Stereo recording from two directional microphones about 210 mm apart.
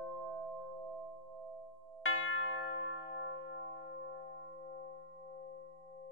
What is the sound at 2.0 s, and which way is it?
Church bell, 70° left (ahead or behind).